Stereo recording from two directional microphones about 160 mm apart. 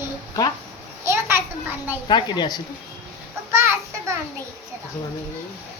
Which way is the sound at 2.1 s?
30° left (ahead or behind).